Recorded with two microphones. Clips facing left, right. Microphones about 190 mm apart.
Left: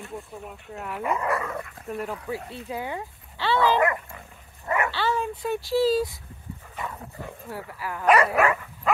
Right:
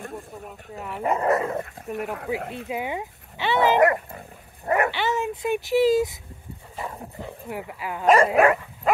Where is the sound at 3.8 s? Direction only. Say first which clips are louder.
Right 5 dB; 40° right (ahead or behind).